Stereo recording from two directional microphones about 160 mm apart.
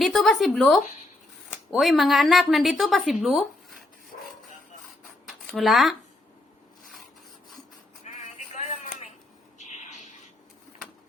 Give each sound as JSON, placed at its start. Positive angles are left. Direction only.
{"t": 0.0, "sound": "a woman's voice", "side_deg": 0}
{"t": 5.5, "sound": "a woman's voice", "side_deg": 0}
{"t": 8.0, "sound": "a sound", "side_deg": 50}